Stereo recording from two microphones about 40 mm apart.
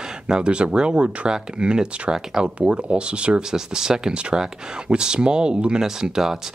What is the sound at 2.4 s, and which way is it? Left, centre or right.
Speech, right.